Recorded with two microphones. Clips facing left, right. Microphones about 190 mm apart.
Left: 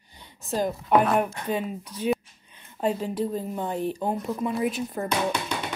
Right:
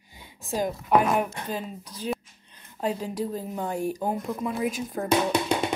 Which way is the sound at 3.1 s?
Centre (ahead or behind).